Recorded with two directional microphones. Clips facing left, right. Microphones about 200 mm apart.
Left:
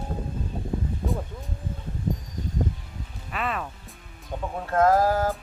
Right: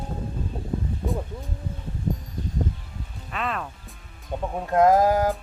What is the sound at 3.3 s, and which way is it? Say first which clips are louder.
Speech: even; centre (ahead or behind).